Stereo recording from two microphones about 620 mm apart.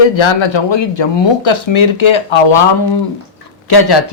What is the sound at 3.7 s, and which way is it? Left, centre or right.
Speech, left.